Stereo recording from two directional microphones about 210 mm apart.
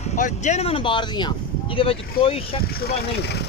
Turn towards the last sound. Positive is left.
turn(degrees=50)  # may be behind; listen again after turning